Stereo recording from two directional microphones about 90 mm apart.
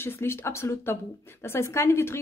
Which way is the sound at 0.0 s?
25° left (ahead or behind).